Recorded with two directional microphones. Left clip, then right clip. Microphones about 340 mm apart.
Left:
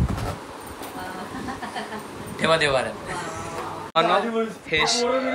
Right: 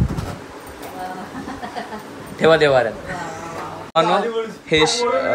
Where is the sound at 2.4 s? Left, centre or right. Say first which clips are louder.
Right 7 dB; right.